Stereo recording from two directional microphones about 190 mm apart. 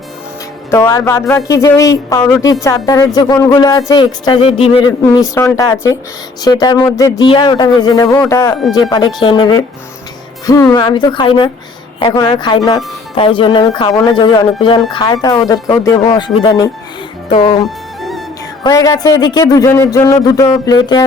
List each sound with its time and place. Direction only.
0.7 s speech: 15° left (ahead or behind); by 4.9 s 30° left (ahead or behind)
4.9 s speech: 20° left (ahead or behind)
18.6 s speech: 20° left (ahead or behind)